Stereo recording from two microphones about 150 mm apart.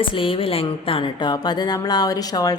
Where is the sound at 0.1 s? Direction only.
35° left (ahead or behind).